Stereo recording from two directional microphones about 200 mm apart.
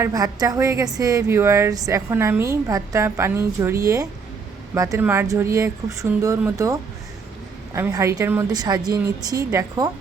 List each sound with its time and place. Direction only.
0.0 s a woman's voice: 20° right (ahead or behind)